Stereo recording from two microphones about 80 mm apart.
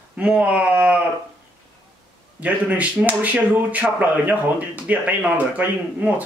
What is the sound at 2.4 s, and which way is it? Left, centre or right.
Speech, centre.